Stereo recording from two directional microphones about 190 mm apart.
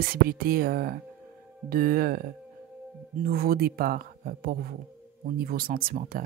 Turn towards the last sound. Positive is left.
turn(degrees=-50)  # may be behind; listen again after turning